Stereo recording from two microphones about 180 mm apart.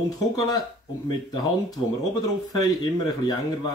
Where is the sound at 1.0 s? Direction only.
25° left (ahead or behind).